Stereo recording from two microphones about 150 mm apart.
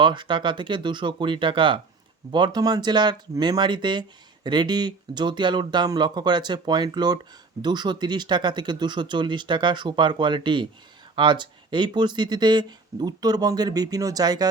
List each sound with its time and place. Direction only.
0.0 s speech: 30° right (ahead or behind)